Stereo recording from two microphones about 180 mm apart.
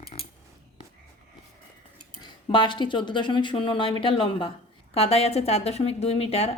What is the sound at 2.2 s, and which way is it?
A woman's voice, 25° left (ahead or behind).